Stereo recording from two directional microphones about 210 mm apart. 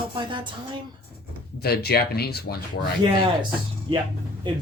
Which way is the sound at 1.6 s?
50° left (ahead or behind).